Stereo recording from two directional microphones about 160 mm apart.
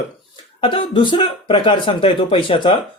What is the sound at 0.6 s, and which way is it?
Speech, 35° left (ahead or behind).